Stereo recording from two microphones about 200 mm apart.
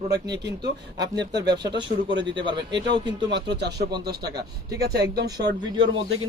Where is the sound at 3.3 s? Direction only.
60° right (ahead or behind).